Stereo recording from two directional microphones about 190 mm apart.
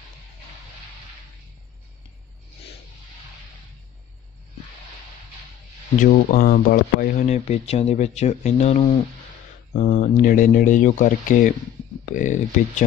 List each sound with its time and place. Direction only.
5.9 s speech: 45° left (ahead or behind)